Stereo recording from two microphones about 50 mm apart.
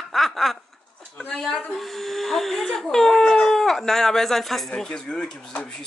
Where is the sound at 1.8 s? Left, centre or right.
Centre.